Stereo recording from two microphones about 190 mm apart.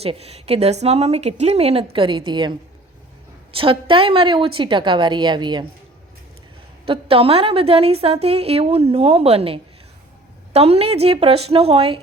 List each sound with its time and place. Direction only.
0.0 s a woman's voice: 30° right (ahead or behind)
6.8 s a woman's voice: 30° right (ahead or behind)